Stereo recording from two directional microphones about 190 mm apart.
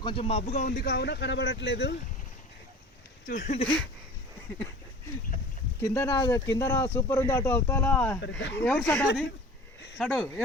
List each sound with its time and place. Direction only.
0.0 s speech: 30° left (ahead or behind)
0.7 s speech: 60° left (ahead or behind)
3.2 s speech: 40° left (ahead or behind)
5.8 s speech: 15° left (ahead or behind)
8.2 s speech: 65° left (ahead or behind)
8.6 s speech: 10° left (ahead or behind)